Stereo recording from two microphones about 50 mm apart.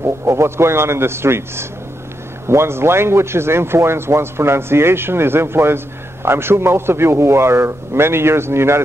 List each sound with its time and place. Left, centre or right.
0.0 s speech: right